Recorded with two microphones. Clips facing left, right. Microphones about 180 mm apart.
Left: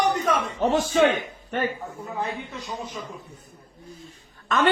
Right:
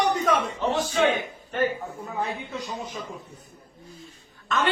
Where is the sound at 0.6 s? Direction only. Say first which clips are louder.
Left 8 dB; 45° left (ahead or behind).